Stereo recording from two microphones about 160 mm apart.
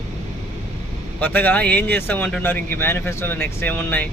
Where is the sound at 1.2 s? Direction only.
10° left (ahead or behind).